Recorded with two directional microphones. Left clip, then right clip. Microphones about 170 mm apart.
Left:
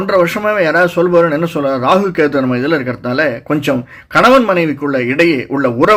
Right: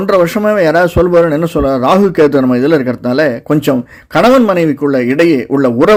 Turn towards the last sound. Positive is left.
turn(degrees=-45)  # may be behind; listen again after turning